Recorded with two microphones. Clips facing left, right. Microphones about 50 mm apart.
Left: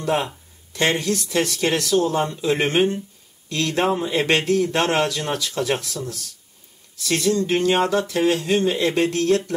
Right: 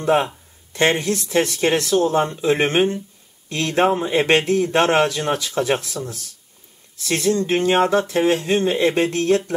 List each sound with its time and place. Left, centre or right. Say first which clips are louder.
0.0 s speech: right 4 dB; right